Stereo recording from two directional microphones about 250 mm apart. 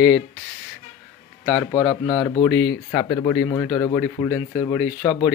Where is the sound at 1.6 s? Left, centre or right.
Centre.